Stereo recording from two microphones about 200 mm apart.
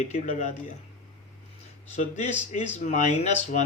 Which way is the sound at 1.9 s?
35° left (ahead or behind).